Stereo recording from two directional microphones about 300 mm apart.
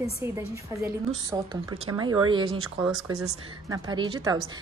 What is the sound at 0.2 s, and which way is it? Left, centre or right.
A woman's voice, centre.